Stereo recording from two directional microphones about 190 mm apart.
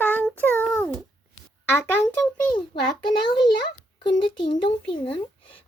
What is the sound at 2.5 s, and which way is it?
A child's voice, 25° left (ahead or behind).